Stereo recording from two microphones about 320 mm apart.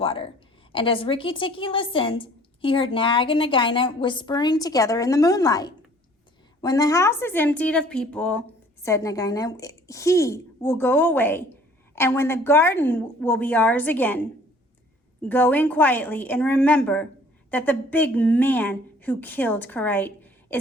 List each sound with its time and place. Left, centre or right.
0.0 s a woman's voice: centre
15.2 s speech: centre